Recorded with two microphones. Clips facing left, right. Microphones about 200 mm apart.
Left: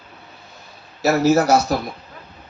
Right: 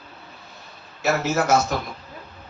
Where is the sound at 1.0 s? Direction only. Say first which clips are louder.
Left 6 dB; 40° left (ahead or behind).